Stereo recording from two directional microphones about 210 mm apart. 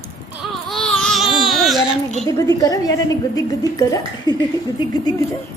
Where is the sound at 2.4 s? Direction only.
15° left (ahead or behind).